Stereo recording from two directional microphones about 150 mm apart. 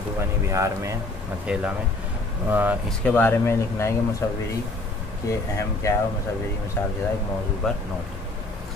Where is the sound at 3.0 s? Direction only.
10° left (ahead or behind).